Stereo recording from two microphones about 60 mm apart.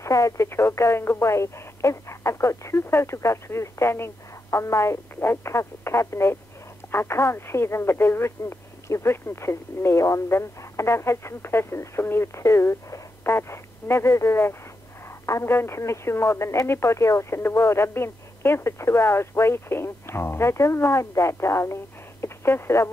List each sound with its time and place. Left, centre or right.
0.0 s speech: left
0.5 s speech: left
15.2 s speech: left
15.5 s speech: left
22.2 s a sound: left